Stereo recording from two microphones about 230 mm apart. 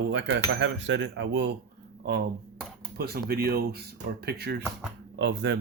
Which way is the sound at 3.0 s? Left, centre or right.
Right.